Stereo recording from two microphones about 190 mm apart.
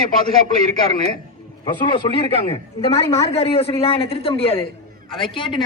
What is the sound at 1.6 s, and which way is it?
Speech, 25° left (ahead or behind).